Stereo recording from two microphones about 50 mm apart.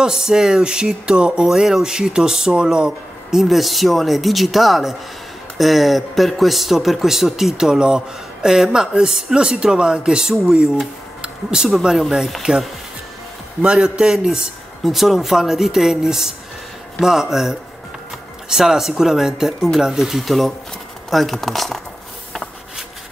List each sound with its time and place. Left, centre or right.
0.0 s speech: centre
3.4 s speech: centre
11.6 s speech: centre
13.7 s speech: centre
14.9 s speech: centre